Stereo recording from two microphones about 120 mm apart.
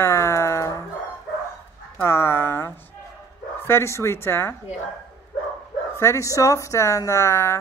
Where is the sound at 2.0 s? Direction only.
20° left (ahead or behind).